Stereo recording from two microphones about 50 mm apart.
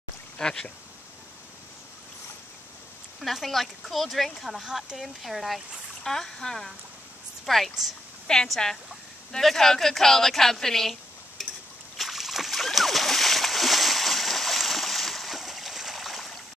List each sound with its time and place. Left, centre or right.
0.4 s speech: centre
3.2 s speech: centre
6.0 s speech: centre
8.3 s speech: centre
12.0 s splash: centre